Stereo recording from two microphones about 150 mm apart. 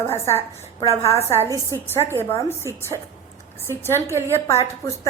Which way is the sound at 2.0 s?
15° left (ahead or behind).